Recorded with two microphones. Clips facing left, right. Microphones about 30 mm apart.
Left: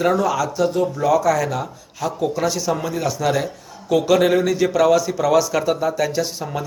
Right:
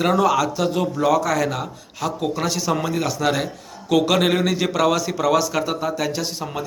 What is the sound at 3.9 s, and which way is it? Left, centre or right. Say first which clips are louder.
Speech: left 1 dB; right.